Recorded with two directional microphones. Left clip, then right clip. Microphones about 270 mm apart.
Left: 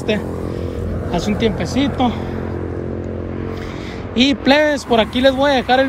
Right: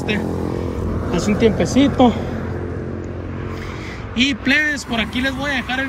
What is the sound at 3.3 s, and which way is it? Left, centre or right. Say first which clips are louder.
Vehicle: left 3 dB; left.